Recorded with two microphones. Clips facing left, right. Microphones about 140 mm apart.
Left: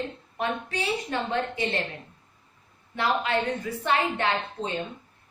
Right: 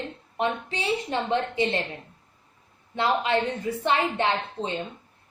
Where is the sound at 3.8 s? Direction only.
20° right (ahead or behind).